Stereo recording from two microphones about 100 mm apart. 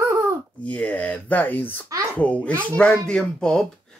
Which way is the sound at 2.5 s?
25° right (ahead or behind).